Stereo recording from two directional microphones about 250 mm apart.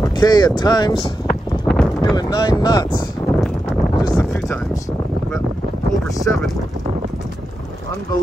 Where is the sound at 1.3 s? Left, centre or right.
Centre.